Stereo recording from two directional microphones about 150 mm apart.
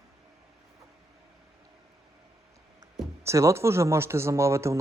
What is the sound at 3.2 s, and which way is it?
Speech, 20° right (ahead or behind).